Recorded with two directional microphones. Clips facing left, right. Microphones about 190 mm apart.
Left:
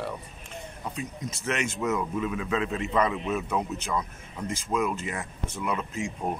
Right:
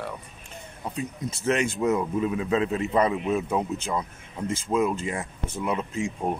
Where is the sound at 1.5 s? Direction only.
35° right (ahead or behind).